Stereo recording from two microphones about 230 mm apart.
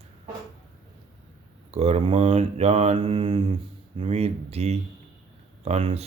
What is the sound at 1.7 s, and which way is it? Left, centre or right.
Speech, right.